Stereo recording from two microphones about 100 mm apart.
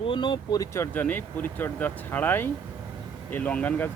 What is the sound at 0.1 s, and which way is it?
Speech, 50° left (ahead or behind).